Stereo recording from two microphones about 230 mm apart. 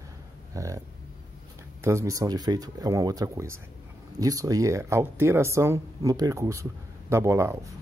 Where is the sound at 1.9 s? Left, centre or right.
Centre.